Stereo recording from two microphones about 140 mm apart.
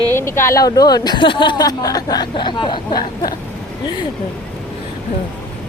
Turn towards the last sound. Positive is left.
turn(degrees=35)  # may be behind; listen again after turning